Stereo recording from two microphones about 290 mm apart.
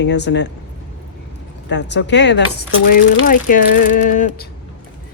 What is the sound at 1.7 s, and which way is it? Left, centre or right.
Speech, left.